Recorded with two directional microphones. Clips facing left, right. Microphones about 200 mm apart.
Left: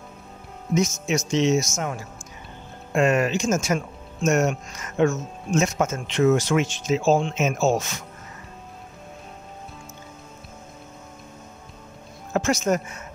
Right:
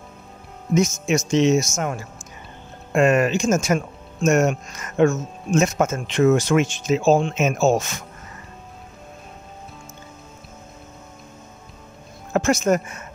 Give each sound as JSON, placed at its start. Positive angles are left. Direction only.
{"t": 0.7, "sound": "speech", "side_deg": -50}
{"t": 2.9, "sound": "speech", "side_deg": -55}
{"t": 12.4, "sound": "speech", "side_deg": -50}